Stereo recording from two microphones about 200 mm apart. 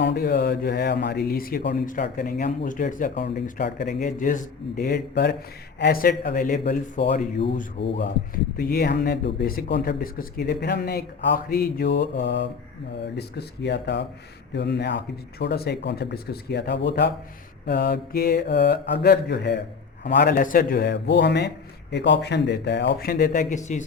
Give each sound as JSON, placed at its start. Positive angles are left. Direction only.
{"t": 0.0, "sound": "speech", "side_deg": 55}
{"t": 3.2, "sound": "speech", "side_deg": 55}
{"t": 7.8, "sound": "speech", "side_deg": 25}
{"t": 8.5, "sound": "a man's voice", "side_deg": 50}
{"t": 20.3, "sound": "a man's voice", "side_deg": 40}